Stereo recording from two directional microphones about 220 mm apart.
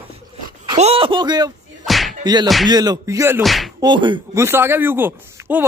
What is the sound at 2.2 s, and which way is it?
Music, 20° right (ahead or behind).